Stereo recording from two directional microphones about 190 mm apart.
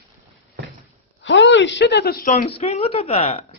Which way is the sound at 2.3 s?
35° left (ahead or behind).